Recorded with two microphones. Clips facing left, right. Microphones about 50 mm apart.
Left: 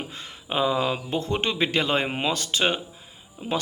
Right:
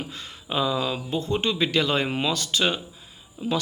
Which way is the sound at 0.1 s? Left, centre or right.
Left.